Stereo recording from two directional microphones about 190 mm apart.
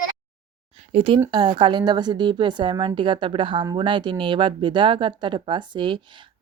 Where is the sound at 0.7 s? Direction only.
30° right (ahead or behind).